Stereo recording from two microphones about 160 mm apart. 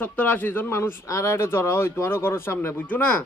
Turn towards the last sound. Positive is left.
turn(degrees=10)  # may be behind; listen again after turning